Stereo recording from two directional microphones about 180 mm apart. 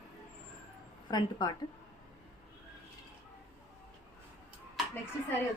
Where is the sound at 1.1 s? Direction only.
20° left (ahead or behind).